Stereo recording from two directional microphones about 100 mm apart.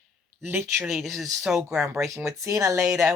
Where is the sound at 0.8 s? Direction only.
Centre (ahead or behind).